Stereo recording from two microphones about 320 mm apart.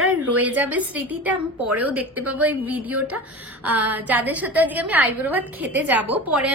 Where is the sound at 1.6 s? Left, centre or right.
Right.